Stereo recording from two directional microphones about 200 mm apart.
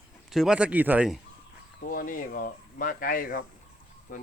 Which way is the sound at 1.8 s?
45° left (ahead or behind).